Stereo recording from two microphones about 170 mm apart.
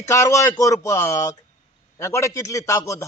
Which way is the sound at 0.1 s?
20° left (ahead or behind).